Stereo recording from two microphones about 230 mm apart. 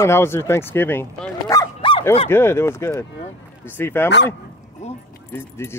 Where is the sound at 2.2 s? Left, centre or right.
Centre.